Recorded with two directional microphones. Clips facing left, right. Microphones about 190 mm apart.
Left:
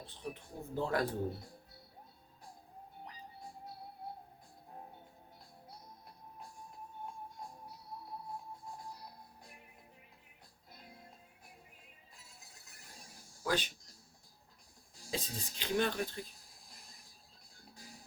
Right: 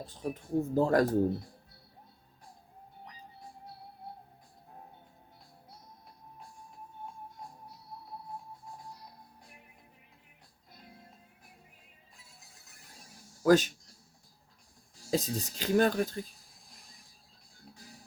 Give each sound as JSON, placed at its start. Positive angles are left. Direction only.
{"t": 0.0, "sound": "speech", "side_deg": -45}
{"t": 13.4, "sound": "speech", "side_deg": -45}
{"t": 15.1, "sound": "speech", "side_deg": -45}